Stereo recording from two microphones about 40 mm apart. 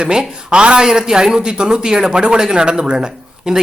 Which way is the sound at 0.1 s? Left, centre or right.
Centre.